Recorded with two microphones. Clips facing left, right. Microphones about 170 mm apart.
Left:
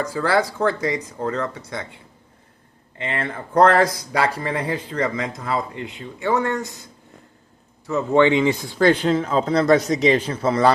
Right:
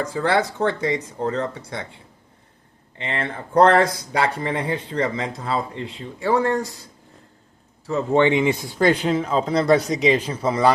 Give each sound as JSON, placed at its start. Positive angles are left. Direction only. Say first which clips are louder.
{"t": 0.0, "sound": "speech", "louder": "even", "side_deg": -25}
{"t": 3.0, "sound": "speech", "louder": "left 1 dB", "side_deg": -25}
{"t": 7.9, "sound": "speech", "louder": "left 1 dB", "side_deg": -25}
{"t": 8.8, "sound": "speech", "louder": "left 2 dB", "side_deg": -10}